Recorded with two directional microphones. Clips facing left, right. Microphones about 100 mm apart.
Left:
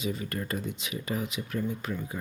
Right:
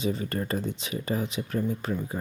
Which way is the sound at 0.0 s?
30° right (ahead or behind).